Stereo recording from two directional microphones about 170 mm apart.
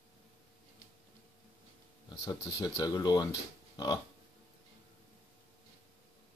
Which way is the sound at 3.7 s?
25° left (ahead or behind).